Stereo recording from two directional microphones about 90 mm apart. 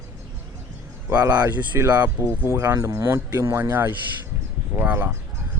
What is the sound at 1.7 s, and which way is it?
Speech, 35° right (ahead or behind).